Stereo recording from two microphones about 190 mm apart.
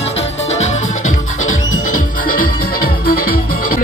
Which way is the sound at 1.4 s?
45° left (ahead or behind).